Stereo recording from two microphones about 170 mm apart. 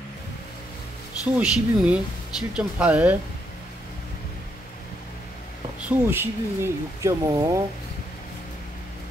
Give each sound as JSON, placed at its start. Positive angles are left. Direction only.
{"t": 1.2, "sound": "speech", "side_deg": -5}
{"t": 6.0, "sound": "speech", "side_deg": -15}